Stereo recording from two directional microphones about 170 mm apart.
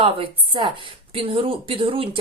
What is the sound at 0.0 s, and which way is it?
Speech, 30° right (ahead or behind).